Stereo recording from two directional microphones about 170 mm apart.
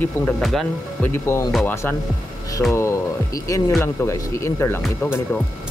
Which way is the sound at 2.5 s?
15° left (ahead or behind).